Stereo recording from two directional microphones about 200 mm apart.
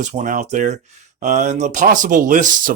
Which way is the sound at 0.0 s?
35° right (ahead or behind).